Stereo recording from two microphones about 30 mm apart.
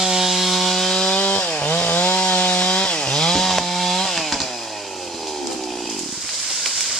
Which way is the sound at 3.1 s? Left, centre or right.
Centre.